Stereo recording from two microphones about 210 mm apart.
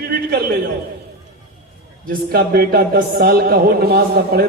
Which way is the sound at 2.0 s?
45° right (ahead or behind).